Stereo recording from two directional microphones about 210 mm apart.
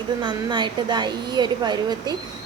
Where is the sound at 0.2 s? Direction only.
20° right (ahead or behind).